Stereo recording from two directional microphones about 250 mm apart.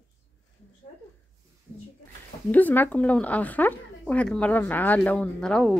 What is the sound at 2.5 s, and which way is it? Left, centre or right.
Speech, centre.